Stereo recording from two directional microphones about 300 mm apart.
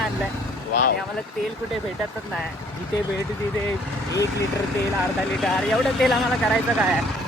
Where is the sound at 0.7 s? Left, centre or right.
Left.